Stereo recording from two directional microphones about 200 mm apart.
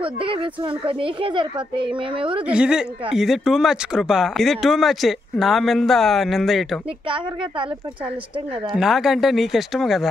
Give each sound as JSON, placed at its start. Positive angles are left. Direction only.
{"t": 0.0, "sound": "speech", "side_deg": -25}
{"t": 2.4, "sound": "speech", "side_deg": -5}
{"t": 8.7, "sound": "speech", "side_deg": 0}